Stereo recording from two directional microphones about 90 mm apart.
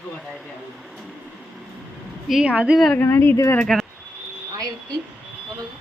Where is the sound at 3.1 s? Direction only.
25° left (ahead or behind).